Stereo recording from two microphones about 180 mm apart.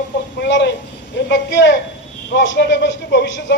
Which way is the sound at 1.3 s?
85° left.